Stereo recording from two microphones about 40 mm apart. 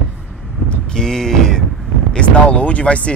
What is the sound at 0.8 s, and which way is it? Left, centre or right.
Vehicle, centre.